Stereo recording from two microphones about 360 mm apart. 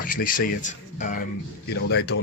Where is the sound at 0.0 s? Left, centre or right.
Left.